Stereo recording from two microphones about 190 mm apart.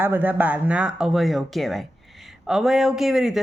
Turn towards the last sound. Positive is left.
turn(degrees=0)  # may be behind; listen again after turning